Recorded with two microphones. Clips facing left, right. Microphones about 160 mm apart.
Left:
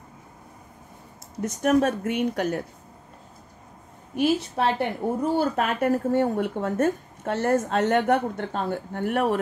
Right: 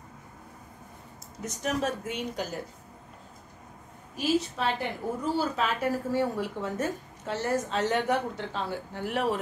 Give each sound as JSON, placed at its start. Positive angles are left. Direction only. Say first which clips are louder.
{"t": 1.4, "sound": "a woman's voice", "louder": "left 9 dB", "side_deg": 55}
{"t": 4.1, "sound": "a woman's voice", "louder": "left 4 dB", "side_deg": 60}